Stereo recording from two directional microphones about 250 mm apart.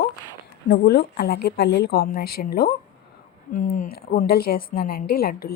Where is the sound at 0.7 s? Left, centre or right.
Left.